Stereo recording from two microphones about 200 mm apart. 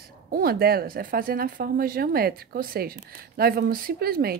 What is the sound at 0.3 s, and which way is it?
A woman's voice, 50° right (ahead or behind).